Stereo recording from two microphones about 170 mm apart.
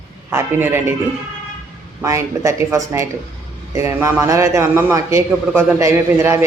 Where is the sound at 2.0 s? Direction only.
20° right (ahead or behind).